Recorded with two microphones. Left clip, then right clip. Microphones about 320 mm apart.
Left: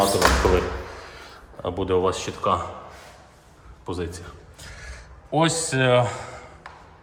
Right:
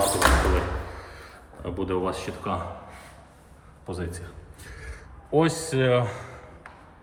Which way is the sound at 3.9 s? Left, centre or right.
Centre.